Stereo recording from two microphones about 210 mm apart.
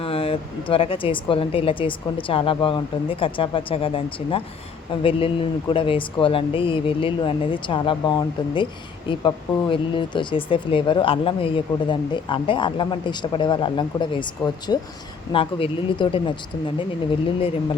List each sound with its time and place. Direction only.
0.0 s speech: 25° left (ahead or behind)